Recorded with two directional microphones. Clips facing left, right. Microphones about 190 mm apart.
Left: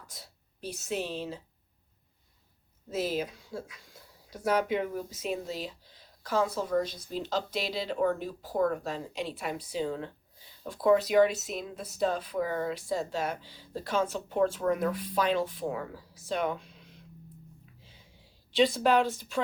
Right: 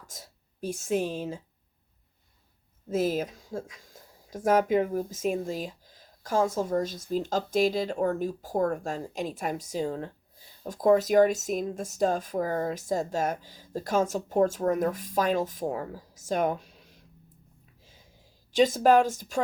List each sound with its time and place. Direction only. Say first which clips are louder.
0.1 s speech: right 3 dB; 45° right (ahead or behind)
2.9 s speech: right 4 dB; 50° right (ahead or behind)
17.8 s a sound: even; 45° right (ahead or behind)